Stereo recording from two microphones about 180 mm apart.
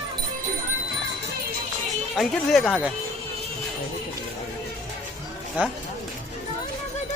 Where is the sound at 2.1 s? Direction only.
Centre (ahead or behind).